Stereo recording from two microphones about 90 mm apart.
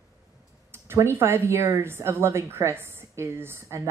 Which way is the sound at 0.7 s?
30° right (ahead or behind).